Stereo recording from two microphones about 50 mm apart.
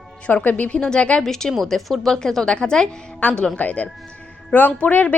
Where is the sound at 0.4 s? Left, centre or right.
Left.